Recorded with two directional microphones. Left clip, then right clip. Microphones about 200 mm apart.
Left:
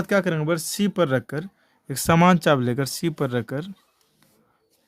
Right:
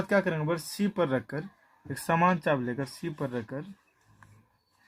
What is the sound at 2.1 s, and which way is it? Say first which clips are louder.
Speech: left 7 dB; 55° left (ahead or behind).